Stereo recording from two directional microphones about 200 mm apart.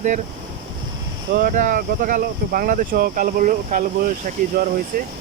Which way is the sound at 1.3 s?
45° right (ahead or behind).